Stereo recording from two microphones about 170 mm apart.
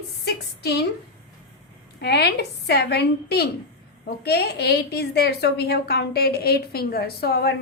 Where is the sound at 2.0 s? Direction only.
75° left (ahead or behind).